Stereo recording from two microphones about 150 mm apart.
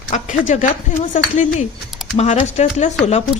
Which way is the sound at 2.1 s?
50° left (ahead or behind).